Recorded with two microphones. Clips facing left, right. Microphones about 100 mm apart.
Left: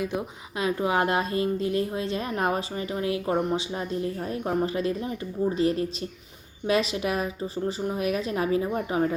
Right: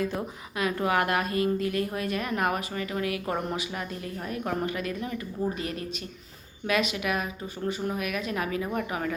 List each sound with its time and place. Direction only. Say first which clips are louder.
0.0 s speech: left 1 dB; 15° left (ahead or behind)